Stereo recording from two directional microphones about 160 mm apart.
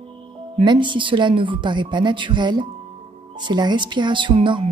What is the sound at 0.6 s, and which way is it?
Speech, 30° right (ahead or behind).